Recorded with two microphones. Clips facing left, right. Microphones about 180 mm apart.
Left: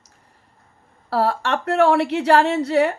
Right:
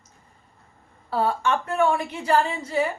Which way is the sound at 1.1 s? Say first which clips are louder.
Left 2 dB; 75° left (ahead or behind).